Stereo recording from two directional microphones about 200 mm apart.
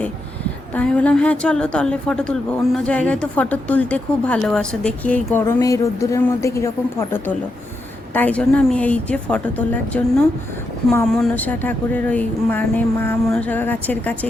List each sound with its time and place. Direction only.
0.7 s a woman's voice: 5° left (ahead or behind)